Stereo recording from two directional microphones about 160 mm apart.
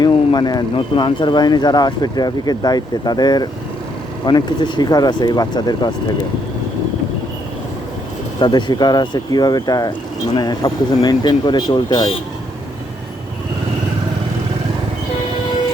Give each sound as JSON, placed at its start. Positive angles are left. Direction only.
{"t": 0.0, "sound": "speech", "side_deg": 25}
{"t": 8.4, "sound": "speech", "side_deg": 30}